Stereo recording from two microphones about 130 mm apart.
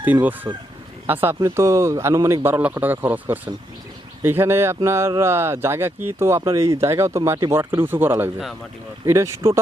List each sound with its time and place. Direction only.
0.0 s speech: 15° right (ahead or behind)